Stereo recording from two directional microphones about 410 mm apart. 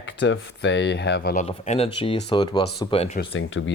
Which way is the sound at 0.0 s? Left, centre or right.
Left.